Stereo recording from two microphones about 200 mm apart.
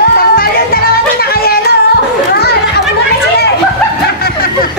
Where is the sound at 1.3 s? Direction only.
50° left (ahead or behind).